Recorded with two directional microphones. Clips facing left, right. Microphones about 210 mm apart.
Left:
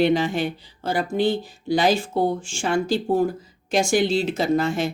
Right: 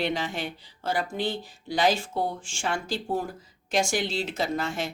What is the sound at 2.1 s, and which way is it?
Speech, 30° left (ahead or behind).